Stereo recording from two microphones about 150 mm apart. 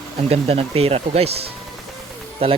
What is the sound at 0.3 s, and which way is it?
Speech, 40° right (ahead or behind).